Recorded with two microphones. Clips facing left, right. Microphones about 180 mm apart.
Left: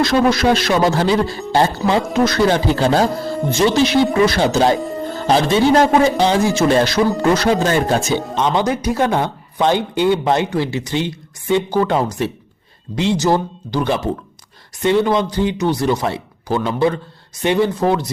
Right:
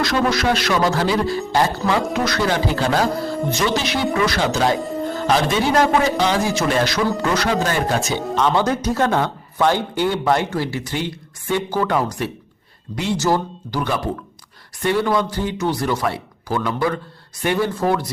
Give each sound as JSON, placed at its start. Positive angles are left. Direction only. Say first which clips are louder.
{"t": 0.0, "sound": "speech", "louder": "left 5 dB", "side_deg": 25}
{"t": 4.1, "sound": "speech", "louder": "left 5 dB", "side_deg": 30}
{"t": 4.8, "sound": "music", "louder": "left 1 dB", "side_deg": 0}
{"t": 5.3, "sound": "speech", "louder": "left 5 dB", "side_deg": 30}
{"t": 8.4, "sound": "speech", "louder": "left 2 dB", "side_deg": 15}